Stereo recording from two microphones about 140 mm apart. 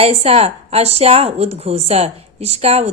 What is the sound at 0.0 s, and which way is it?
A woman's voice, 45° right (ahead or behind).